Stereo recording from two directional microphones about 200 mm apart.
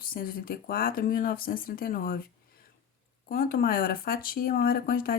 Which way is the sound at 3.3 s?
45° left (ahead or behind).